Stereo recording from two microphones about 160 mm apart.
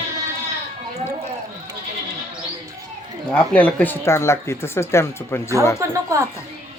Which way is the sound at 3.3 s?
10° left (ahead or behind).